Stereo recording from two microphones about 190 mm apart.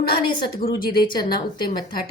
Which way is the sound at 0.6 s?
50° left (ahead or behind).